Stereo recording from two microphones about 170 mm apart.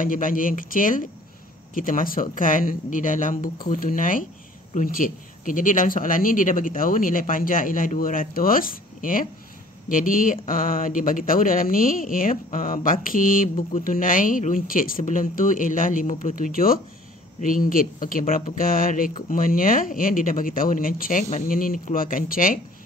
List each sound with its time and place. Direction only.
0.0 s speech: 55° left (ahead or behind)